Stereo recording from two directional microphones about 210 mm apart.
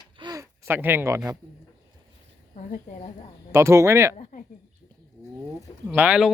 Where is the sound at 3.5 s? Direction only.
15° right (ahead or behind).